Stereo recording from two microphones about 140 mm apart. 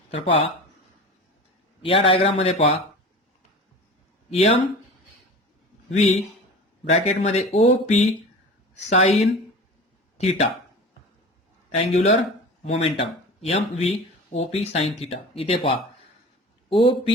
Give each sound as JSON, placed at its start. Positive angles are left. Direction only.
{"t": 0.1, "sound": "speech", "side_deg": 45}
{"t": 1.8, "sound": "speech", "side_deg": 40}
{"t": 4.3, "sound": "speech", "side_deg": 45}
{"t": 5.9, "sound": "speech", "side_deg": 50}
{"t": 11.7, "sound": "speech", "side_deg": 55}